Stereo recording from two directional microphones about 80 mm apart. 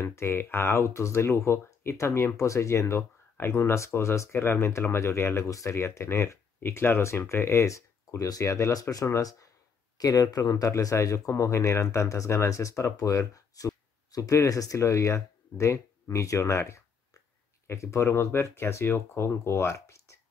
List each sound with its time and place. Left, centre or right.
0.0 s speech: left